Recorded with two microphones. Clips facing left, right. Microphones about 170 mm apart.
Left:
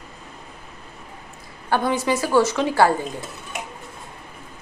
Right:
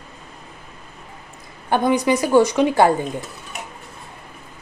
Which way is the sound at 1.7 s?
20° right (ahead or behind).